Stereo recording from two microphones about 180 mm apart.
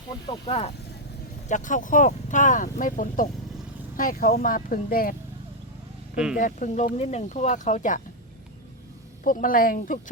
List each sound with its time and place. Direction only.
0.3 s speech: 30° left (ahead or behind)
1.5 s speech: 45° left (ahead or behind)
6.3 s speech: 45° left (ahead or behind)
9.2 s speech: 50° left (ahead or behind)